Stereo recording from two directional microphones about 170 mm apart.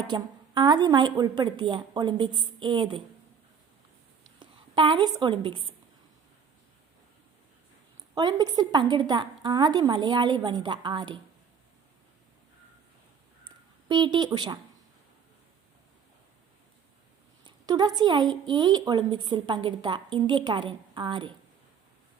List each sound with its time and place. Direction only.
0.1 s a woman's voice: 25° right (ahead or behind)
4.4 s a sound: 30° right (ahead or behind)
5.2 s a woman's voice: 30° right (ahead or behind)
8.1 s a woman's voice: 25° right (ahead or behind)
13.4 s a sound: 25° right (ahead or behind)
14.3 s a woman's voice: 25° right (ahead or behind)
17.4 s a woman's voice: 25° right (ahead or behind)